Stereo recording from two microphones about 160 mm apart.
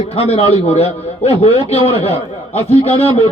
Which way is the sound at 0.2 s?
40° left (ahead or behind).